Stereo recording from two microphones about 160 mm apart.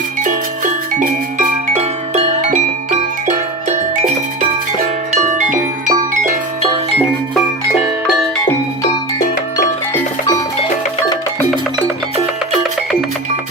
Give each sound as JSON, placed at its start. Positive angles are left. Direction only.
{"t": 0.9, "sound": "music", "side_deg": -55}
{"t": 5.1, "sound": "music", "side_deg": -50}